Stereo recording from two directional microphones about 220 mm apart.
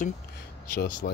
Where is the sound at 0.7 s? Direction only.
50° left (ahead or behind).